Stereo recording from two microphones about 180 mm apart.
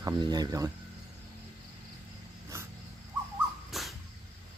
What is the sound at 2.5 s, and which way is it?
Dog, 15° right (ahead or behind).